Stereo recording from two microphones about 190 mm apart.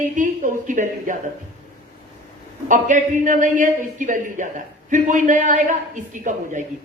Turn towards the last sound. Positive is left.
turn(degrees=-40)  # may be behind; listen again after turning